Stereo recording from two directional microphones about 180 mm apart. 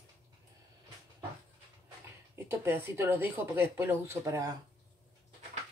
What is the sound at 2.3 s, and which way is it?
Speech, 15° right (ahead or behind).